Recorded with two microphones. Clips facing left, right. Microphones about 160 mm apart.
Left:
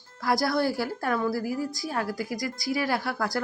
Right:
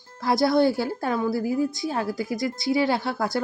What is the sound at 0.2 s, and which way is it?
Speech, 25° right (ahead or behind).